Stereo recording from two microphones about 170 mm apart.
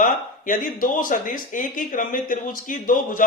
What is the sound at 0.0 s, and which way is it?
A man's voice, 55° left (ahead or behind).